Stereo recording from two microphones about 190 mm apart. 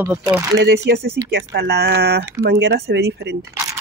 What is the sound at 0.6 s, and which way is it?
Speech, 65° right (ahead or behind).